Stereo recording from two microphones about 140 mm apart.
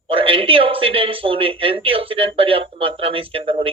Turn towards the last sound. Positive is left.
turn(degrees=-40)  # may be behind; listen again after turning